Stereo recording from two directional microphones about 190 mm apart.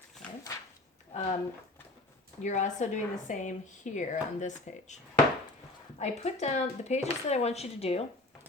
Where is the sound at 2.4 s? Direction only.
40° left (ahead or behind).